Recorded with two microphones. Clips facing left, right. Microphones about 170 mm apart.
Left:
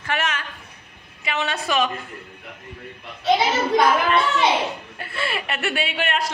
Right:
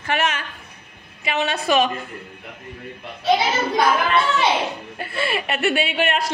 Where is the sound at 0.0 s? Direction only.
25° right (ahead or behind).